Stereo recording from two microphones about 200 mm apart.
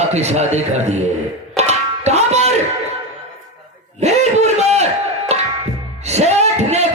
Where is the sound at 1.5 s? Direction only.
35° right (ahead or behind).